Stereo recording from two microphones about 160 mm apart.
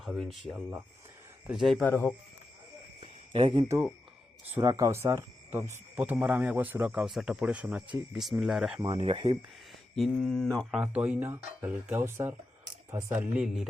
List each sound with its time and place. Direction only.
0.0 s speech: centre (ahead or behind)
0.5 s a man's voice: 10° right (ahead or behind)
1.5 s speech: centre (ahead or behind)
1.9 s speech: 15° left (ahead or behind)
3.0 s a sound: 35° right (ahead or behind)
4.6 s a man's voice: 20° right (ahead or behind); by 8.8 s centre (ahead or behind)
9.0 s speech: 35° right (ahead or behind)
9.9 s a man's voice: centre (ahead or behind)